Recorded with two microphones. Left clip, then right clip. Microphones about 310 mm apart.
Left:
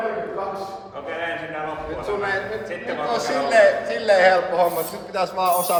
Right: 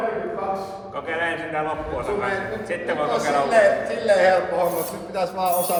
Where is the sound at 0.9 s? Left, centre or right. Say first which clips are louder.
Right 3 dB; right.